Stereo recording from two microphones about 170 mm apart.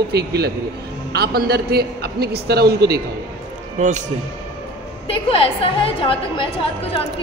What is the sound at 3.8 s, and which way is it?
Speech, 45° right (ahead or behind).